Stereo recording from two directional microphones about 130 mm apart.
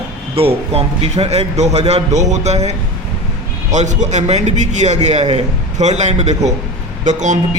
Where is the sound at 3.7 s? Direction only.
65° right (ahead or behind).